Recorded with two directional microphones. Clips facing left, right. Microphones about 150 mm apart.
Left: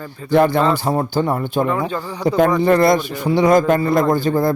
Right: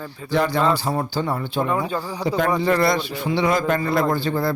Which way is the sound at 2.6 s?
50° left (ahead or behind).